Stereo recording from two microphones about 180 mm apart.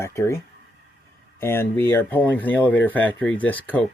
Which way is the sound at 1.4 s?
10° left (ahead or behind).